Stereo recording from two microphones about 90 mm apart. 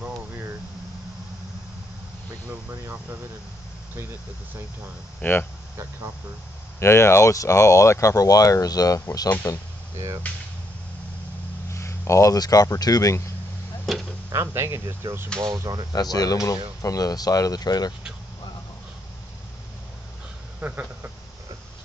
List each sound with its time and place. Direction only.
2.7 s speech: 20° right (ahead or behind)
5.2 s speech: 25° left (ahead or behind)
6.8 s speech: 30° left (ahead or behind)
9.3 s speech: 30° left (ahead or behind)
10.3 s speech: 15° left (ahead or behind)
11.7 s speech: 30° left (ahead or behind)
13.9 s speech: centre (ahead or behind)
14.3 s speech: 30° right (ahead or behind)
15.4 s speech: 45° right (ahead or behind)
15.9 s speech: 45° left (ahead or behind)
20.6 s a sound: 20° right (ahead or behind)